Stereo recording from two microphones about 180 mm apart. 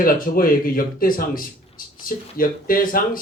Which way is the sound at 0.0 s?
50° left (ahead or behind).